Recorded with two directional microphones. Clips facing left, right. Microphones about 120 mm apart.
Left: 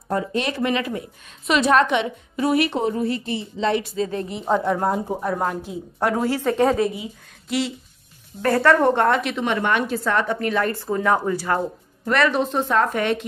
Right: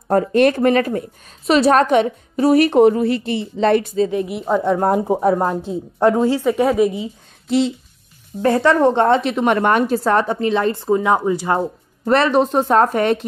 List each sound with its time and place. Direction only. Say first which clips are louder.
0.1 s a woman's voice: right 10 dB; 55° right (ahead or behind)
2.8 s speech: right 10 dB; 80° right; by 4.0 s 50° right (ahead or behind)
4.1 s a woman's voice: right 3 dB; 10° right (ahead or behind)
4.8 s speech: right 7 dB; 65° right (ahead or behind)
5.4 s a woman's voice: right 5 dB; 25° right (ahead or behind)
6.4 s speech: right 3 dB; 10° right (ahead or behind)
6.9 s a woman's voice: right 6 dB; 30° right (ahead or behind)
9.4 s a woman's voice: right 6 dB; 50° right (ahead or behind); by 11.6 s 20° right (ahead or behind)
12.0 s a woman's voice: right 5 dB; 35° right (ahead or behind)